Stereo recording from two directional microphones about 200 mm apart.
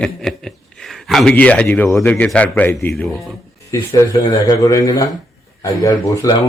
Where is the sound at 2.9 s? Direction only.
Centre (ahead or behind).